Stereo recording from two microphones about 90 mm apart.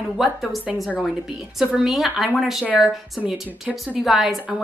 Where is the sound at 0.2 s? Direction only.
Centre (ahead or behind).